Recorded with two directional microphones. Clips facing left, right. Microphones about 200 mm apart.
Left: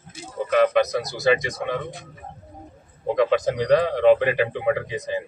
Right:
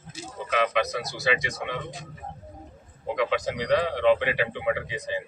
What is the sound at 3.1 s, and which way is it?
Speech, 50° left (ahead or behind).